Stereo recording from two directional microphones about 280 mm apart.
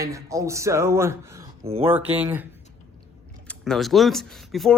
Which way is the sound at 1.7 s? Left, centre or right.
Right.